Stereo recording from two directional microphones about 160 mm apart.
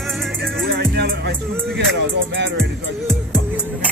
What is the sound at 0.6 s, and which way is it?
Music, 90° right.